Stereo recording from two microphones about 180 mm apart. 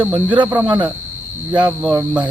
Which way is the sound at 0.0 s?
10° right (ahead or behind).